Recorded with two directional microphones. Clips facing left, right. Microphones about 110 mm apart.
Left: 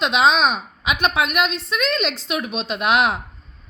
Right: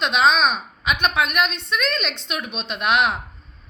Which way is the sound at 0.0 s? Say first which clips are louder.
Left 1 dB; 25° left (ahead or behind).